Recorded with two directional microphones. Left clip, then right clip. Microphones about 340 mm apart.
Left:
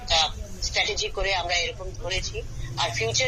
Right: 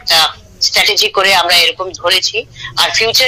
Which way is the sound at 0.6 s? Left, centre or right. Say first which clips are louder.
Right 15 dB; right.